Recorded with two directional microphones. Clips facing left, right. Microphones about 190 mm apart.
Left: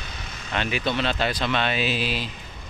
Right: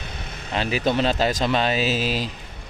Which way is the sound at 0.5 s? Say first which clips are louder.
Right 4 dB; 35° right (ahead or behind).